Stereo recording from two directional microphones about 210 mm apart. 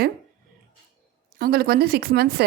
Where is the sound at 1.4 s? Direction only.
45° right (ahead or behind).